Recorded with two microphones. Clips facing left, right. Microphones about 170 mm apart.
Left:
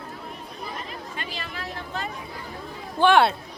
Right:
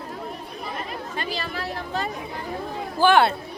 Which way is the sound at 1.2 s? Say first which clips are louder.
Right 7 dB; 35° right (ahead or behind).